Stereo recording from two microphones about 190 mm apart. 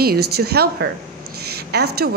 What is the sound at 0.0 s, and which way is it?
A woman's voice, 55° right (ahead or behind).